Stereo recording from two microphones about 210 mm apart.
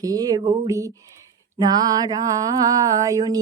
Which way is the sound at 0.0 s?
15° right (ahead or behind).